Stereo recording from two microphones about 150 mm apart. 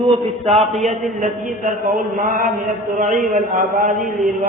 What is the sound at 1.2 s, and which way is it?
A man's voice, 60° right (ahead or behind).